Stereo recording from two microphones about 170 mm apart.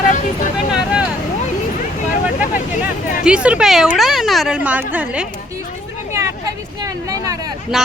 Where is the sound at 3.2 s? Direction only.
5° right (ahead or behind).